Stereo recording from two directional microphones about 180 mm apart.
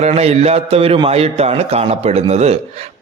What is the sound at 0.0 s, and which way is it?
A man's voice, 35° right (ahead or behind).